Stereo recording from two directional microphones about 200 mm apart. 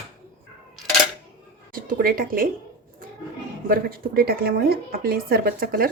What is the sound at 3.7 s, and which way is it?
A woman's voice, 50° right (ahead or behind).